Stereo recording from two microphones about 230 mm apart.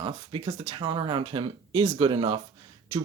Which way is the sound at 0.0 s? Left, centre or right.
Right.